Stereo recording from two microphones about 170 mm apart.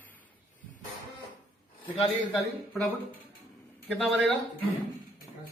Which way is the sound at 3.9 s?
Centre (ahead or behind).